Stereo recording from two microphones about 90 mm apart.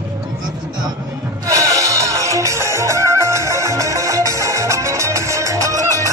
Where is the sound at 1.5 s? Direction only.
40° right (ahead or behind).